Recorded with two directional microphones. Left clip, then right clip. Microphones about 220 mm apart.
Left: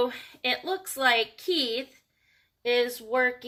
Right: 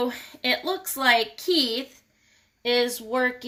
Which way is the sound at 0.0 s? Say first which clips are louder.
Right 1 dB; 45° right (ahead or behind).